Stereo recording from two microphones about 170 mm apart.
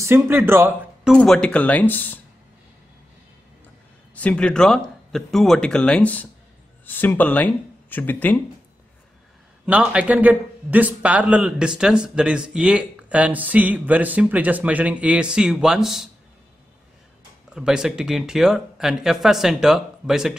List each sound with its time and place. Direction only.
0.0 s speech: 15° right (ahead or behind)
1.1 s speech: 5° left (ahead or behind)
4.1 s speech: 10° left (ahead or behind)
9.7 s a man's voice: 5° right (ahead or behind)
17.6 s speech: 5° right (ahead or behind)